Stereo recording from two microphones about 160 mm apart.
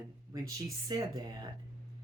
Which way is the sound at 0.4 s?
25° right (ahead or behind).